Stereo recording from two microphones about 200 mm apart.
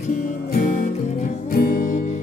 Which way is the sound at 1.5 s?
45° left (ahead or behind).